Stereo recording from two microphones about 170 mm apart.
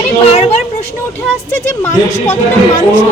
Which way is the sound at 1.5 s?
15° left (ahead or behind).